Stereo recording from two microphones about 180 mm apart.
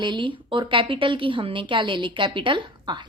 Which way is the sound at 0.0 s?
25° right (ahead or behind).